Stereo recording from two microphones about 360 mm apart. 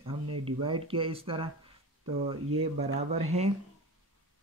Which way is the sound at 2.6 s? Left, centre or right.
Centre.